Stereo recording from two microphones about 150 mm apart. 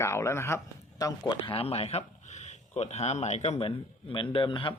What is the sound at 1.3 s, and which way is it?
Speech, 35° left (ahead or behind).